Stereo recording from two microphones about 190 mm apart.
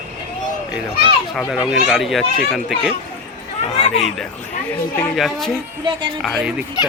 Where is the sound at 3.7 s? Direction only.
35° left (ahead or behind).